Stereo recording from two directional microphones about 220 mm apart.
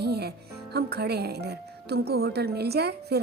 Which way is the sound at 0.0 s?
45° right (ahead or behind).